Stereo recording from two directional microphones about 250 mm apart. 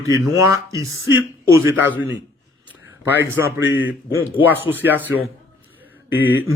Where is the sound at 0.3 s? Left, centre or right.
Centre.